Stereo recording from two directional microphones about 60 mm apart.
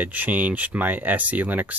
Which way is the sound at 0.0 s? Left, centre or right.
Right.